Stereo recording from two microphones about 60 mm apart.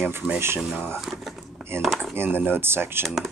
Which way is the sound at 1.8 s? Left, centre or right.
Centre.